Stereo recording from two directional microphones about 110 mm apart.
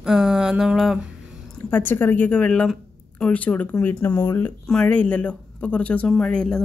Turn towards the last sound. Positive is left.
turn(degrees=10)  # may be behind; listen again after turning